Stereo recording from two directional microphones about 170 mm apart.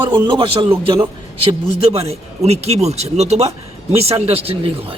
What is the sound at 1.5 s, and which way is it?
Speech, 35° right (ahead or behind).